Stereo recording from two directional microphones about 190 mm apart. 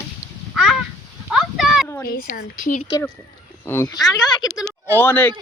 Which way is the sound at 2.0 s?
50° left (ahead or behind).